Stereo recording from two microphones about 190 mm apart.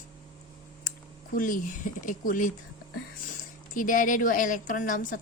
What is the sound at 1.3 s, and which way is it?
A woman's voice, 45° left (ahead or behind).